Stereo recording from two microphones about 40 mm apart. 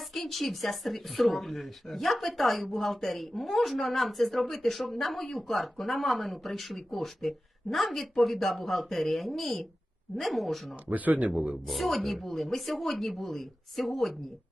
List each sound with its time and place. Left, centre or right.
0.1 s speech: centre
10.8 s speech: right
11.7 s speech: centre